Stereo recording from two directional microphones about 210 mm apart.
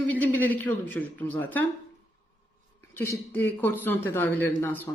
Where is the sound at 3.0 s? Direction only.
10° left (ahead or behind).